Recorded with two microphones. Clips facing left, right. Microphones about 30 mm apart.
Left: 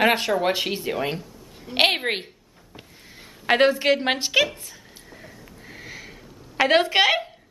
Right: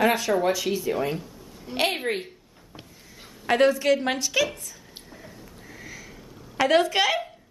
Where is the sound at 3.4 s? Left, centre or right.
Left.